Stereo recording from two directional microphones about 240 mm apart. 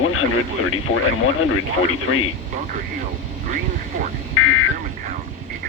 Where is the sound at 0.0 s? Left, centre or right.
Left.